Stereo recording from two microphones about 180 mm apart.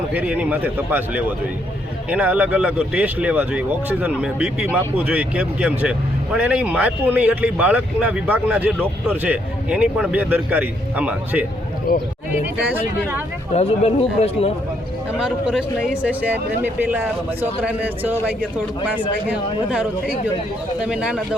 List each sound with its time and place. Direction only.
0.1 s speech: 10° right (ahead or behind)
11.9 s speech: 55° left (ahead or behind)
13.5 s speech: 35° left (ahead or behind)
15.2 s speech: 5° right (ahead or behind)